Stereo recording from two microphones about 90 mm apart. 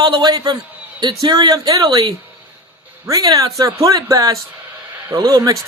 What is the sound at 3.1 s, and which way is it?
Speech, 45° right (ahead or behind).